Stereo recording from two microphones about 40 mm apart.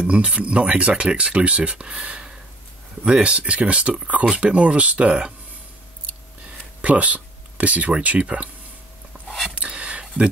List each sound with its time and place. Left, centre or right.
0.0 s speech: right
6.8 s speech: right
9.6 s a sound: right